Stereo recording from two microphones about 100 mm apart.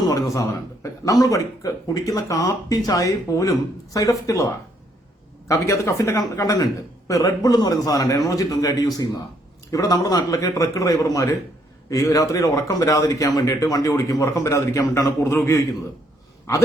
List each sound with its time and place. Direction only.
0.0 s a man's voice: 35° left (ahead or behind)